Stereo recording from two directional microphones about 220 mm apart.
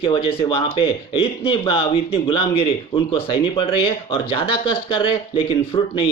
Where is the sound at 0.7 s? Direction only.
25° left (ahead or behind).